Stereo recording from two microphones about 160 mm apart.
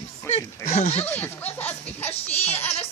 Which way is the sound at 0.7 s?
45° left (ahead or behind).